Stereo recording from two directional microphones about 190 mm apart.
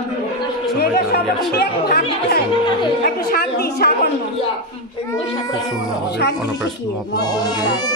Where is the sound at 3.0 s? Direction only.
50° left (ahead or behind).